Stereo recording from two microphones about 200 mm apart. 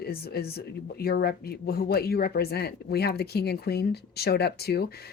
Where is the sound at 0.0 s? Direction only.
50° left (ahead or behind).